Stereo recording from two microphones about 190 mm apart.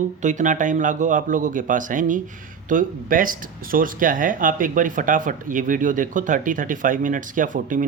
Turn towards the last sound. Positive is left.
turn(degrees=-45)  # may be behind; listen again after turning